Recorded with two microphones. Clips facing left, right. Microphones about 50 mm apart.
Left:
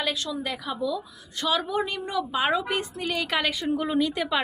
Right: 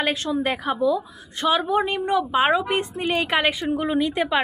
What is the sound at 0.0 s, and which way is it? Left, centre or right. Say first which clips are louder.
A woman's voice: right 6 dB; right.